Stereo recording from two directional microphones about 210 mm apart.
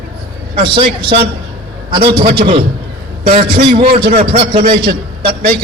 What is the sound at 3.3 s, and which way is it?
A man's voice, 25° right (ahead or behind).